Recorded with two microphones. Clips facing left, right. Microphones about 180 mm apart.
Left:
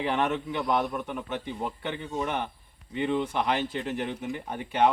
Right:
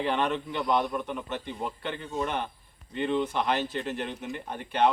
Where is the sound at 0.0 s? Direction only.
5° left (ahead or behind).